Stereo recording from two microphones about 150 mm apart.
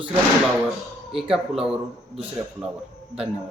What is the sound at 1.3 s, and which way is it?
Speech, 5° right (ahead or behind).